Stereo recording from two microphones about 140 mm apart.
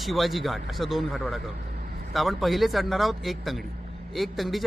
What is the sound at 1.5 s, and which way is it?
Vehicle, 90° right.